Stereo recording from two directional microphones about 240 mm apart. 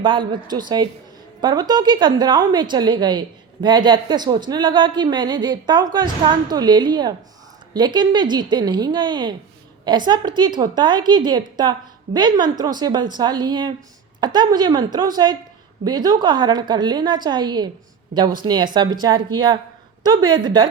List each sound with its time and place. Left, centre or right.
0.0 s a woman's voice: centre